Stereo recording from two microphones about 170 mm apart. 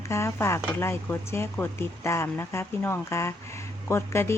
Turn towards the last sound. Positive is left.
turn(degrees=15)  # may be behind; listen again after turning